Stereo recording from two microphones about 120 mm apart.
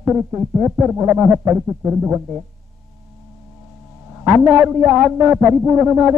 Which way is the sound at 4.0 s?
15° right (ahead or behind).